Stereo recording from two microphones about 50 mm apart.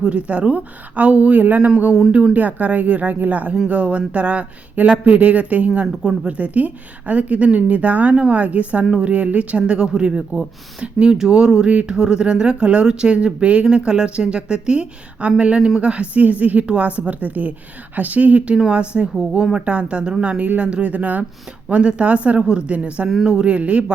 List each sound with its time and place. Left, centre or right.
0.0 s a woman's voice: right
18.5 s speech: centre
23.0 s a woman's voice: centre